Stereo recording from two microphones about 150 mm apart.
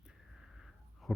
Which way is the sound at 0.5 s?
Centre (ahead or behind).